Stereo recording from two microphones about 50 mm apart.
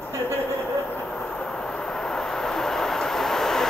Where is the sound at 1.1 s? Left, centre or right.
Centre.